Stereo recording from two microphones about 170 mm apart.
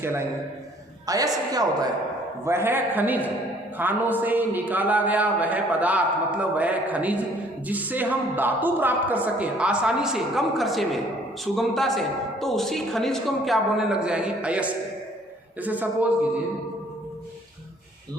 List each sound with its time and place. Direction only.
0.0 s a woman's voice: 15° right (ahead or behind)